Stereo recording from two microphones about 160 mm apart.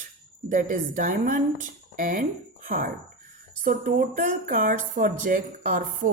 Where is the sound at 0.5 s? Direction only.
55° right (ahead or behind).